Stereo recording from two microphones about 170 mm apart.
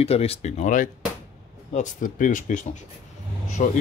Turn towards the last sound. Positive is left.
turn(degrees=50)  # may be behind; listen again after turning